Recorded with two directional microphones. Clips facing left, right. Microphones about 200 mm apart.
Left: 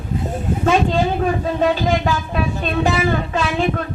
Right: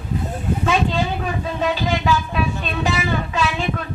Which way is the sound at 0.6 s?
45° left (ahead or behind).